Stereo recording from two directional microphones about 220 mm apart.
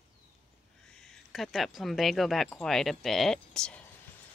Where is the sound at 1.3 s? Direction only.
Centre (ahead or behind).